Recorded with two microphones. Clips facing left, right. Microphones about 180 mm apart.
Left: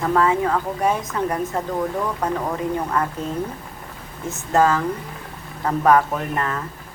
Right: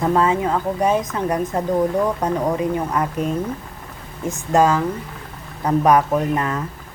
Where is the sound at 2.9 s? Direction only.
20° right (ahead or behind).